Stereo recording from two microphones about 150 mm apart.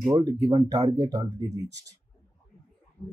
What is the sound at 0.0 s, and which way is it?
Speech, 20° right (ahead or behind).